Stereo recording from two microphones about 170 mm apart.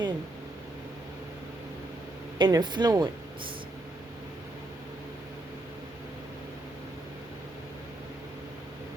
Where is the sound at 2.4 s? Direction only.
25° right (ahead or behind).